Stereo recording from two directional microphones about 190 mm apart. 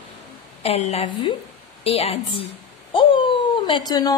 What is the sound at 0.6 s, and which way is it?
A woman's voice, 35° left (ahead or behind).